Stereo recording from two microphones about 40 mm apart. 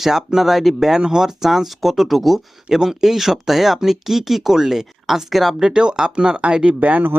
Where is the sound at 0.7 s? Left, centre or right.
Centre.